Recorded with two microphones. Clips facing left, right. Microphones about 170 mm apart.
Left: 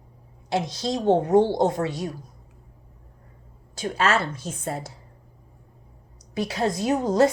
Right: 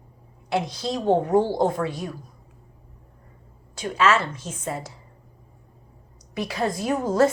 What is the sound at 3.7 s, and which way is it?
Speech, 35° left (ahead or behind).